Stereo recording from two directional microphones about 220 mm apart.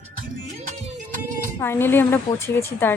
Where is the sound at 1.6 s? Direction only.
10° left (ahead or behind).